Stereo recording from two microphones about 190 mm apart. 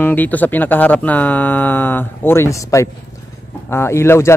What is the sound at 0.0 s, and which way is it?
Speech, 10° left (ahead or behind).